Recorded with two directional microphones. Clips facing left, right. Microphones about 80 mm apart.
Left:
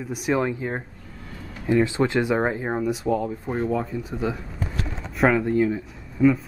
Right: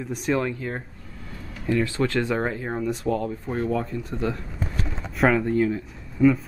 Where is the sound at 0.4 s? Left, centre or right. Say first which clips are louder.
Left 2 dB; centre.